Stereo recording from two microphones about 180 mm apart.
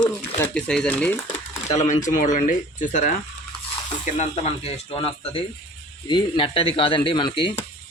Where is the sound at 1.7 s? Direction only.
40° left (ahead or behind).